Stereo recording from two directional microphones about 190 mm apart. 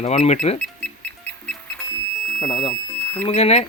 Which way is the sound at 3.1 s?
30° left (ahead or behind).